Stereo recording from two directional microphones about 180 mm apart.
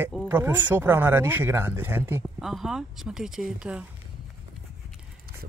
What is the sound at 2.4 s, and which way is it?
Speech, centre (ahead or behind).